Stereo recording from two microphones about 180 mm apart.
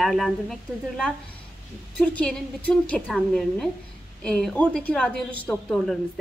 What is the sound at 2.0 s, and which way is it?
A woman's voice, 5° left (ahead or behind).